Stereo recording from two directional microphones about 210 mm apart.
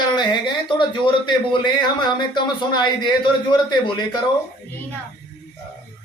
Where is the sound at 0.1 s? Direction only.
20° left (ahead or behind).